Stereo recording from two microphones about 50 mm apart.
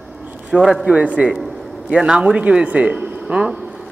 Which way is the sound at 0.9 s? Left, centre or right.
Right.